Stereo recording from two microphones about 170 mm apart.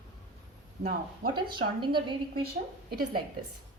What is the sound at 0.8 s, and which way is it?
Speech, 60° right (ahead or behind).